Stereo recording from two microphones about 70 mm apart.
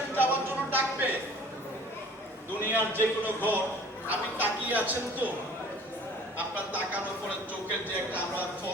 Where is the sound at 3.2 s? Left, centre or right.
Right.